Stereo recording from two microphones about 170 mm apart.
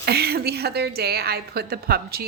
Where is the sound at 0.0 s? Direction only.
70° right (ahead or behind).